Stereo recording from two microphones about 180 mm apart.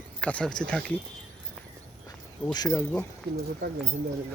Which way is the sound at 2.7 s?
10° left (ahead or behind).